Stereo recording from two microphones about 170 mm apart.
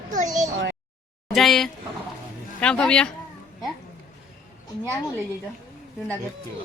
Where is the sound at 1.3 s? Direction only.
Centre (ahead or behind).